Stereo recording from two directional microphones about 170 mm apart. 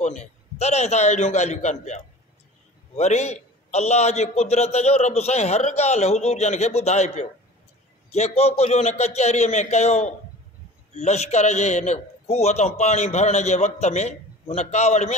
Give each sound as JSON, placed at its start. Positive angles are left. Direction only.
{"t": 0.0, "sound": "a man's voice", "side_deg": 40}
{"t": 3.0, "sound": "a man's voice", "side_deg": 40}